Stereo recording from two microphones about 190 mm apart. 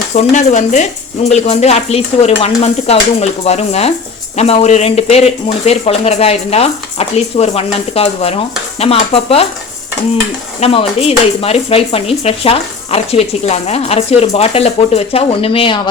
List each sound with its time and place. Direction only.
0.1 s speech: 35° left (ahead or behind)
10.6 s speech: 30° left (ahead or behind)